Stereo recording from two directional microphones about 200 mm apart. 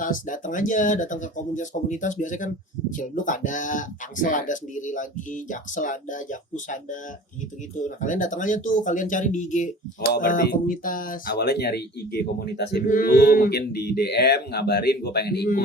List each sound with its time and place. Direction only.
0.0 s speech: 40° left (ahead or behind)
7.8 s speech: 40° left (ahead or behind)